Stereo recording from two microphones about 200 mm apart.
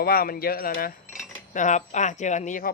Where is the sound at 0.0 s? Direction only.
50° left (ahead or behind).